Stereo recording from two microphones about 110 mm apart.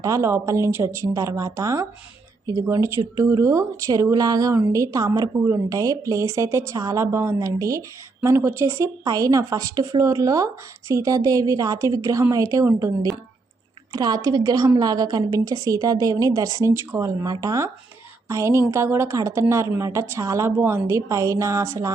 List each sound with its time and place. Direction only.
0.0 s a woman's voice: 30° right (ahead or behind)